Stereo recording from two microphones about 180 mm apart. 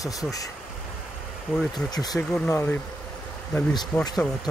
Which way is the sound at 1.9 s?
20° left (ahead or behind).